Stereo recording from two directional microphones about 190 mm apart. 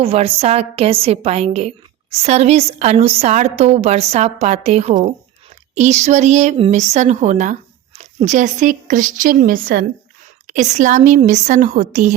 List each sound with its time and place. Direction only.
0.0 s a woman's voice: 30° right (ahead or behind)